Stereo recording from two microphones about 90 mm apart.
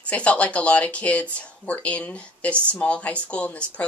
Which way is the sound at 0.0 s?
15° left (ahead or behind).